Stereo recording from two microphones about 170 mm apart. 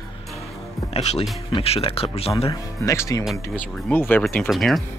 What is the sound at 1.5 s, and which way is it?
Speech, 35° left (ahead or behind).